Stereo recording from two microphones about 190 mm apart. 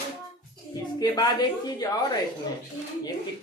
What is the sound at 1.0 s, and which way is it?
Speech, 20° left (ahead or behind).